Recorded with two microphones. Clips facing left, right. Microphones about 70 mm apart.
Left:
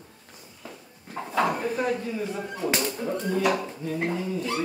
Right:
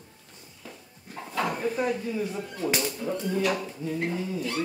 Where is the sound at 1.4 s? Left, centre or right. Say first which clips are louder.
Left 3 dB; centre.